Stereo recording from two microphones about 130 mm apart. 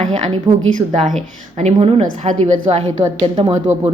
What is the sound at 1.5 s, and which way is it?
A woman's voice, 60° right (ahead or behind).